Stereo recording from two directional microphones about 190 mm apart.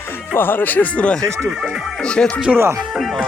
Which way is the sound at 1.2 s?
10° right (ahead or behind).